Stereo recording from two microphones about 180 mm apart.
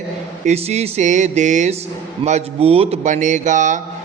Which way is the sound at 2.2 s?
35° right (ahead or behind).